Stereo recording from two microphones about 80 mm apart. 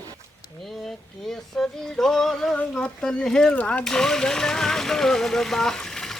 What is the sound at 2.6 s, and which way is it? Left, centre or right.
Speech, centre.